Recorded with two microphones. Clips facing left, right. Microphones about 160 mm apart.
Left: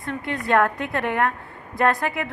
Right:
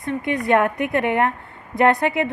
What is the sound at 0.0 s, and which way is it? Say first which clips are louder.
A woman's voice: right 5 dB; 20° right (ahead or behind).